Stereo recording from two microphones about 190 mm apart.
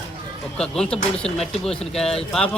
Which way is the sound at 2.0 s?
30° left (ahead or behind).